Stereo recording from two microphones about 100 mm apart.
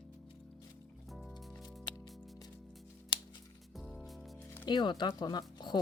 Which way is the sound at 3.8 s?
Centre (ahead or behind).